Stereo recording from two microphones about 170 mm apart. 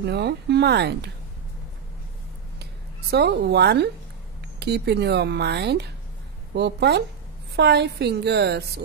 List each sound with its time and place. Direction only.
0.0 s speech: 75° right (ahead or behind)
2.6 s speech: 75° right (ahead or behind)